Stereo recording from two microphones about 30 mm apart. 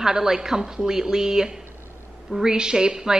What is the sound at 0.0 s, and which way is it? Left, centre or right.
A woman's voice, centre.